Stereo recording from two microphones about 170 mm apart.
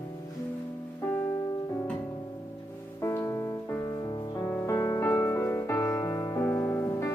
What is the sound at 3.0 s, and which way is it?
Music, 15° left (ahead or behind).